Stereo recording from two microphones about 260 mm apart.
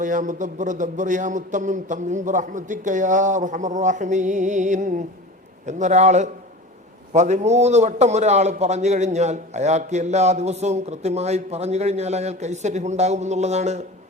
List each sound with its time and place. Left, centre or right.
0.0 s a man's voice: right